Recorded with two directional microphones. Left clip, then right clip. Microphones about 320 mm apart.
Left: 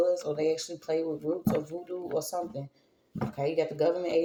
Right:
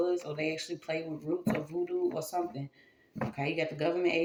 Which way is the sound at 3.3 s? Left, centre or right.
Left.